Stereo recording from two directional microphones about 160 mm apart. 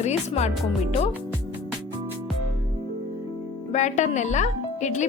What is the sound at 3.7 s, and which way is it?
Speech, 50° left (ahead or behind).